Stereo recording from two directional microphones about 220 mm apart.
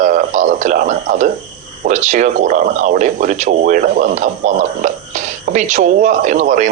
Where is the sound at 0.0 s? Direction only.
35° right (ahead or behind).